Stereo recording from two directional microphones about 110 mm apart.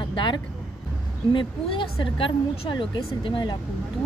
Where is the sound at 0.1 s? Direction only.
45° left (ahead or behind).